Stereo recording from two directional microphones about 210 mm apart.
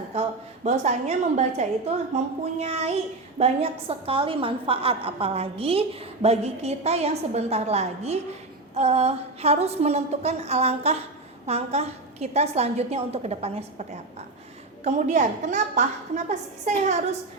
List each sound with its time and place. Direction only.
0.1 s a woman's voice: 30° right (ahead or behind)